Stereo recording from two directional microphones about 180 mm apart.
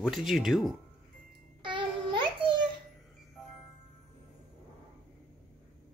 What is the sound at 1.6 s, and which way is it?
Child singing, 25° right (ahead or behind).